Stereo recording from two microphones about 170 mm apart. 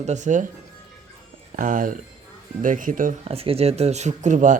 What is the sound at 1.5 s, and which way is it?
Speech, 50° right (ahead or behind).